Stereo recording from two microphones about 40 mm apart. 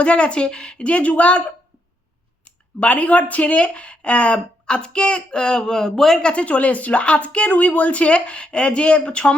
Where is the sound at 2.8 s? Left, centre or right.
Left; by 6.2 s centre.